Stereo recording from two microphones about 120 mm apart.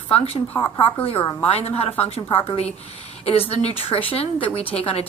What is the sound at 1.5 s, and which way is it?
Speech, 55° left (ahead or behind).